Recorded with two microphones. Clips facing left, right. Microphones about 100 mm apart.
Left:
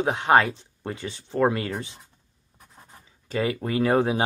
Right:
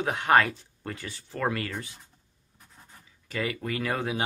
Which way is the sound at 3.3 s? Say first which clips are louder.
Left 5 dB; 30° left (ahead or behind).